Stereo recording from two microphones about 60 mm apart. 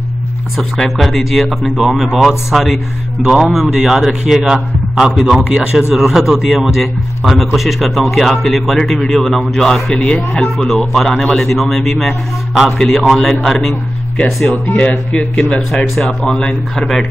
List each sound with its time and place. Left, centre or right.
0.6 s a man's voice: centre
5.5 s a man's voice: centre